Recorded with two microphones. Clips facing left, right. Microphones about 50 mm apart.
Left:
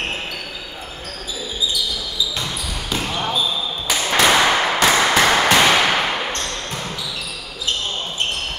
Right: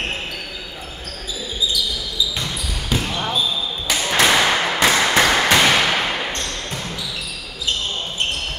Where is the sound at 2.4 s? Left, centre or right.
Centre.